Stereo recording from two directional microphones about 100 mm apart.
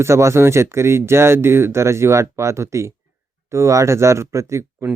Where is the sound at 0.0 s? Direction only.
30° right (ahead or behind).